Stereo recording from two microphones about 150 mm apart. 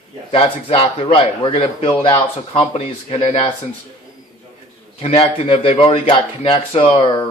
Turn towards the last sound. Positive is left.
turn(degrees=35)  # may be behind; listen again after turning